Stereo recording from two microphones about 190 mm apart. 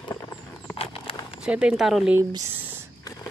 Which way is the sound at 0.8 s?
30° left (ahead or behind).